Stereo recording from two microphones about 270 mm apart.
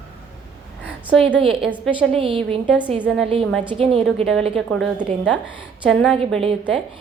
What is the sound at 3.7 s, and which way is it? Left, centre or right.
Speech, right.